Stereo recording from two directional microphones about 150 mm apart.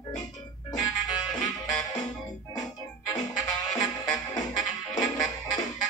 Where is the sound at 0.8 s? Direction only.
25° left (ahead or behind).